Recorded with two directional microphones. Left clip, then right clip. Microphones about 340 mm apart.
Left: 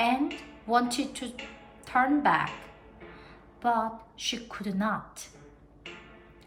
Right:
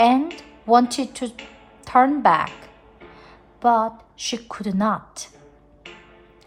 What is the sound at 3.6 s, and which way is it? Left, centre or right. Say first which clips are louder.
A woman's voice: right 9 dB; centre.